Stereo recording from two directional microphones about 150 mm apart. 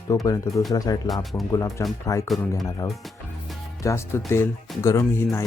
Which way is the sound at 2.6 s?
25° left (ahead or behind).